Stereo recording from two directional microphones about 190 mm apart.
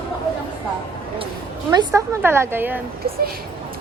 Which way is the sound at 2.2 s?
10° right (ahead or behind).